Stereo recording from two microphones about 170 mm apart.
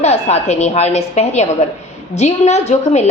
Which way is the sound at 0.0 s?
40° left (ahead or behind).